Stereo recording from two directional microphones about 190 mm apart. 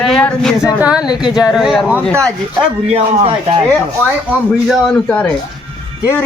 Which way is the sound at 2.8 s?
30° right (ahead or behind).